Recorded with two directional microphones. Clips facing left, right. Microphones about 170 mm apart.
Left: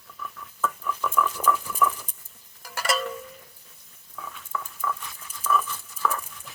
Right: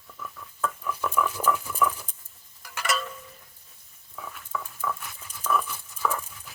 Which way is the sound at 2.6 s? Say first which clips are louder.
Left 2 dB; 40° left (ahead or behind).